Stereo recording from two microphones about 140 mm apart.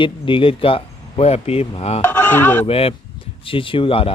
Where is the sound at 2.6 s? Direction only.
45° left (ahead or behind).